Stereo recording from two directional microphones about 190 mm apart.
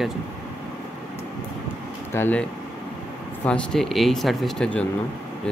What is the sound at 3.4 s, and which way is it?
Speech, 5° left (ahead or behind).